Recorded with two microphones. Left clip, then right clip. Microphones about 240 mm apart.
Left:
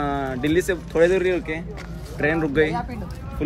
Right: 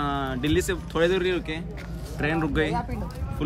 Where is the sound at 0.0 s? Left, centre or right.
Centre.